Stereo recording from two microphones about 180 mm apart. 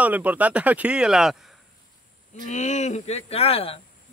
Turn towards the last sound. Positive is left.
turn(degrees=35)  # may be behind; listen again after turning